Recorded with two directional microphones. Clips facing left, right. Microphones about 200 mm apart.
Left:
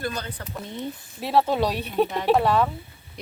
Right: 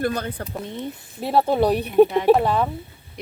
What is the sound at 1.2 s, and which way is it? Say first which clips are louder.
A woman's voice: right 3 dB; 20° right (ahead or behind).